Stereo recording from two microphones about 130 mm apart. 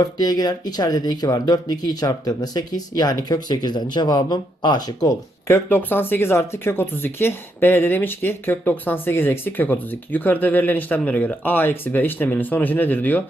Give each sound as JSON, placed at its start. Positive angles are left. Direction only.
{"t": 0.0, "sound": "speech", "side_deg": 30}
{"t": 5.5, "sound": "speech", "side_deg": 15}